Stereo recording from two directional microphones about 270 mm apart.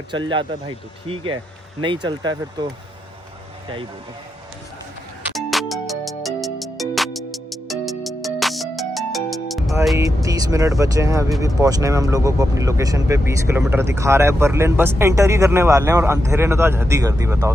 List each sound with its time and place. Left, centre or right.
1.0 s speech: centre
5.3 s music: centre
10.2 s speech: centre